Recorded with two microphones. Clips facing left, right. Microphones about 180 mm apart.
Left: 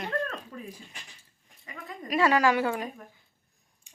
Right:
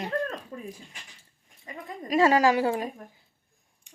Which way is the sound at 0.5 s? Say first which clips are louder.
Right 2 dB; 30° right (ahead or behind).